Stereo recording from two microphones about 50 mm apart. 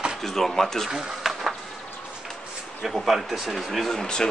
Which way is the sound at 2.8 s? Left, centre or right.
Centre.